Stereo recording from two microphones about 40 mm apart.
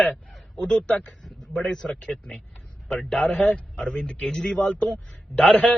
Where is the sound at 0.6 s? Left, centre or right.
Left.